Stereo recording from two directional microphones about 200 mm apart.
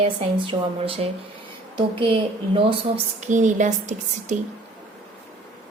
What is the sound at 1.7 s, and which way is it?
A woman's voice, 25° right (ahead or behind).